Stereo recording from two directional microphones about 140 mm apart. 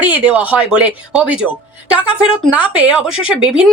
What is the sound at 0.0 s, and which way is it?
A woman's voice, 10° right (ahead or behind).